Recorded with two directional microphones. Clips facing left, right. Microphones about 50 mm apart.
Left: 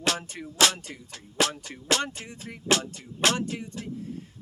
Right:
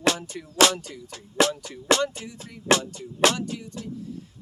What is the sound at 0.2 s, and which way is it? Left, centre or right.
Speech, left.